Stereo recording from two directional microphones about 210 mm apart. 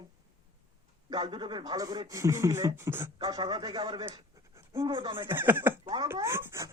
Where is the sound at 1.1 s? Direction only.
20° right (ahead or behind).